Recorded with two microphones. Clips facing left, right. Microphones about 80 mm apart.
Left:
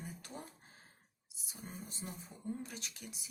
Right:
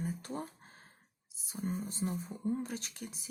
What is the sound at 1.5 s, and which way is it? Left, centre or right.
Speech, right.